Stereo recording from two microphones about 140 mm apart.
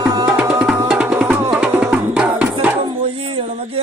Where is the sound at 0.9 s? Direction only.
5° right (ahead or behind).